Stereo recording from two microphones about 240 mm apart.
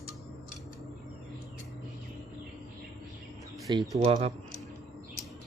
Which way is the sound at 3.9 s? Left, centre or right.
Right.